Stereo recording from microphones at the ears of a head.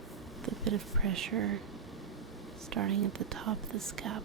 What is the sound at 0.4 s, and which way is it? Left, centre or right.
Speech, right.